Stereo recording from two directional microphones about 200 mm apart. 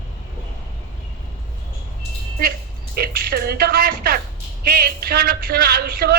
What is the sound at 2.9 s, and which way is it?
A man's voice, 50° right (ahead or behind).